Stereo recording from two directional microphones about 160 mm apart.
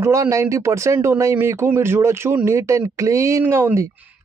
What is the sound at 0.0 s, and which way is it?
Speech, 20° right (ahead or behind).